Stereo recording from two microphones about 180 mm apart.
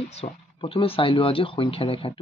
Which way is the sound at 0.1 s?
30° left (ahead or behind).